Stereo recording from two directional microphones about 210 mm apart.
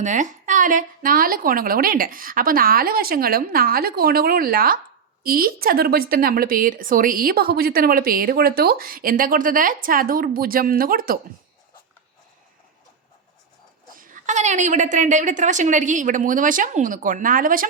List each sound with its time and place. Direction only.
0.0 s a woman's voice: 35° right (ahead or behind)
13.9 s a woman's voice: 40° right (ahead or behind)